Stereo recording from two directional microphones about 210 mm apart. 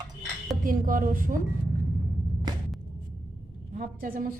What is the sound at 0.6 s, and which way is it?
Speech, 40° right (ahead or behind).